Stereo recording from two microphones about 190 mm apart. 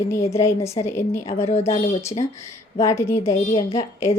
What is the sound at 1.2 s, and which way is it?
Speech, 35° left (ahead or behind).